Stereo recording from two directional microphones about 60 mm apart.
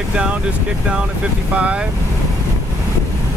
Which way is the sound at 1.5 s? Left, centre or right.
Right.